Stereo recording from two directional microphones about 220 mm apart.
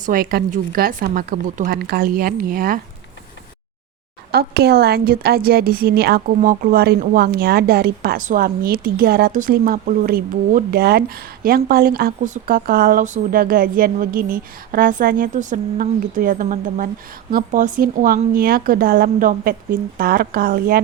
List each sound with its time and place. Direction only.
0.0 s speech: 40° right (ahead or behind)
4.3 s a woman's voice: 45° right (ahead or behind)